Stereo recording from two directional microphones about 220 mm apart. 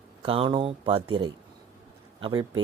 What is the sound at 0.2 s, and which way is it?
Speech, 25° right (ahead or behind).